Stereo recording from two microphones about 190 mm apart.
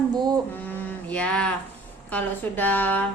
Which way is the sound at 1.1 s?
5° left (ahead or behind).